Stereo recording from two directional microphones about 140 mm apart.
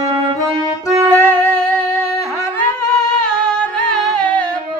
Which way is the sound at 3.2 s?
5° left (ahead or behind).